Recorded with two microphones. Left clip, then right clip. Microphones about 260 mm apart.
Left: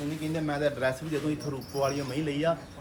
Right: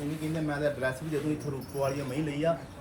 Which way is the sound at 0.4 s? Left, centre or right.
Centre.